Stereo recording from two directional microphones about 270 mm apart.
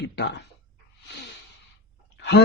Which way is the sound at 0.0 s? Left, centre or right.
Left.